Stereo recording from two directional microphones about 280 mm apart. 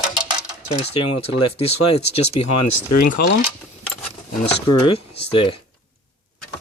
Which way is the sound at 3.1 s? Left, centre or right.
Left.